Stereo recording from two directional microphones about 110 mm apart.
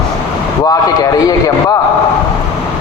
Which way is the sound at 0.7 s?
35° left (ahead or behind).